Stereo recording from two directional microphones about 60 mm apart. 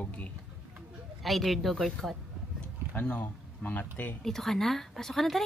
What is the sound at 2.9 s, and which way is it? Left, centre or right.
Speech, left.